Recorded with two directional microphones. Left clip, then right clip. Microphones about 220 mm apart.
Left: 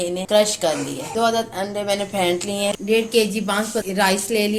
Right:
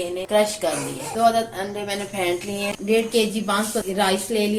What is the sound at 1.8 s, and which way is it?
A woman's voice, 35° left (ahead or behind).